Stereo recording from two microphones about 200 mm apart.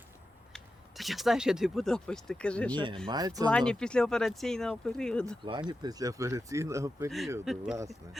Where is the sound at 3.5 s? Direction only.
5° left (ahead or behind).